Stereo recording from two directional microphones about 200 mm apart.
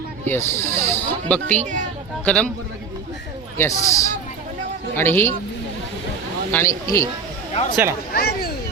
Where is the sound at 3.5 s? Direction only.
15° left (ahead or behind).